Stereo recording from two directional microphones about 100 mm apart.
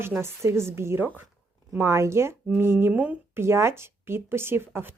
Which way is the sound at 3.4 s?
25° right (ahead or behind).